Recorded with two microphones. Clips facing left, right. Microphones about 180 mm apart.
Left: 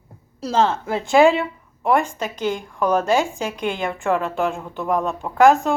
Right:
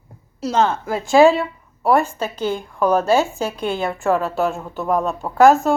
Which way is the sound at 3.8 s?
40° right (ahead or behind).